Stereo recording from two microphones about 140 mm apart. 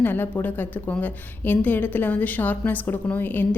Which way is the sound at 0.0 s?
15° left (ahead or behind).